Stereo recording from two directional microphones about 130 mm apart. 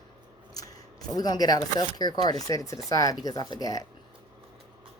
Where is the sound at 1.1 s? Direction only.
30° left (ahead or behind).